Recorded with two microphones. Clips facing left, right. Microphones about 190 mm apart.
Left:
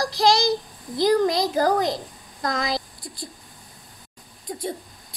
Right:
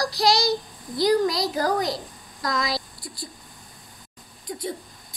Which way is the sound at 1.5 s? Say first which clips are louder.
Left 3 dB; 30° left (ahead or behind).